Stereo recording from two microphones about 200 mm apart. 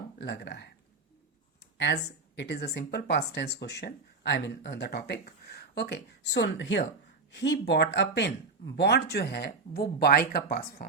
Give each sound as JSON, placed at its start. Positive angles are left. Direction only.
{"t": 0.2, "sound": "speech", "side_deg": 55}
{"t": 1.8, "sound": "speech", "side_deg": 60}